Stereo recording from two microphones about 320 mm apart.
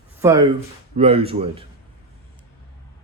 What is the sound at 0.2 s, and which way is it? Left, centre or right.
Speech, centre.